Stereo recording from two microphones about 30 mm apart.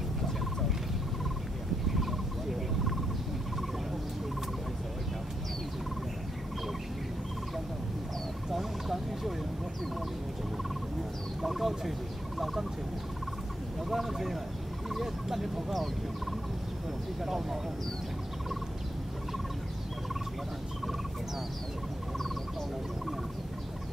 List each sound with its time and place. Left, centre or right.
1.9 s a sound: centre
8.5 s turkey: centre
11.4 s speech: centre
13.8 s speech: centre
14.9 s fowl: centre
17.2 s speech: centre